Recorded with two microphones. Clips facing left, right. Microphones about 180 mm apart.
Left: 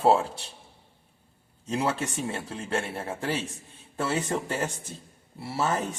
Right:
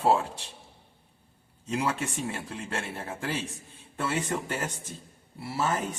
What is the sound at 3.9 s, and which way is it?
Speech, 35° left (ahead or behind).